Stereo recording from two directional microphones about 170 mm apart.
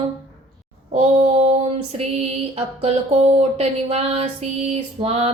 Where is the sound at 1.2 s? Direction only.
35° right (ahead or behind).